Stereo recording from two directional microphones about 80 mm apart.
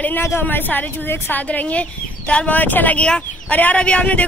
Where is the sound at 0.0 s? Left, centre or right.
Left.